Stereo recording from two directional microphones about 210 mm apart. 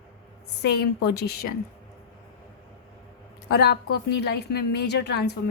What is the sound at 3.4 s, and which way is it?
A woman's voice, 50° left (ahead or behind).